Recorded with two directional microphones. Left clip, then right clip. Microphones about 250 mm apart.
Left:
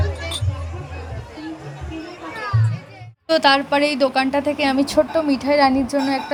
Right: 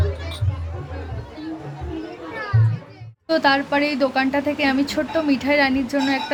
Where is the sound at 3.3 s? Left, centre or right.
Left.